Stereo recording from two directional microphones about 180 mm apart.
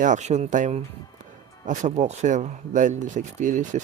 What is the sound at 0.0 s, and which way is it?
Speech, 40° right (ahead or behind).